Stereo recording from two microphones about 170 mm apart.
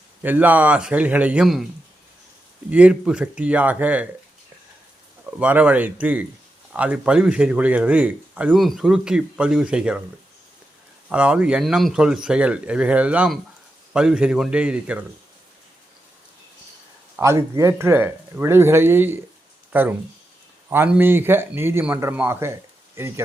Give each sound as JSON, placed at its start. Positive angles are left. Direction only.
{"t": 0.2, "sound": "speech", "side_deg": -10}
{"t": 2.6, "sound": "speech", "side_deg": -5}
{"t": 5.4, "sound": "speech", "side_deg": -10}
{"t": 11.1, "sound": "speech", "side_deg": -5}
{"t": 17.2, "sound": "speech", "side_deg": -15}